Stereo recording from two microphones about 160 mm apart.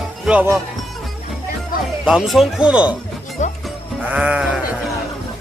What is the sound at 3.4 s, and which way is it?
Music, 50° left (ahead or behind).